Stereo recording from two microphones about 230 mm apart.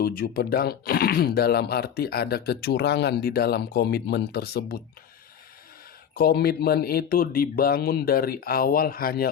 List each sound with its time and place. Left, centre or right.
0.0 s speech: left
6.1 s speech: left